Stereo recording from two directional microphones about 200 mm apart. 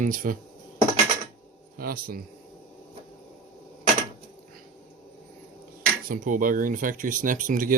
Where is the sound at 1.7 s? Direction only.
45° right (ahead or behind).